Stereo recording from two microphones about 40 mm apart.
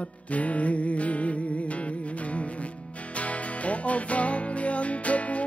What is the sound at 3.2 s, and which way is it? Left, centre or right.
Music, left.